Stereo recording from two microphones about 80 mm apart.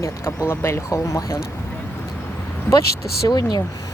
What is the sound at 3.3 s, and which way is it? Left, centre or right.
Speech, left.